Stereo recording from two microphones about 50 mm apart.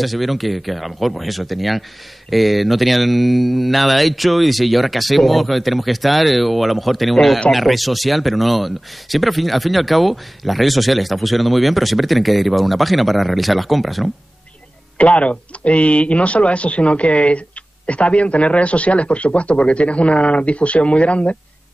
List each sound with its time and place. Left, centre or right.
0.0 s speech: centre
15.0 s a man's voice: left